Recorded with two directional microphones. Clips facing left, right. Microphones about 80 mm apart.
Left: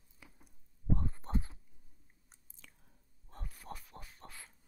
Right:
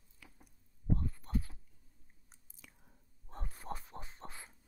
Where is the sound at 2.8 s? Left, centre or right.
Right.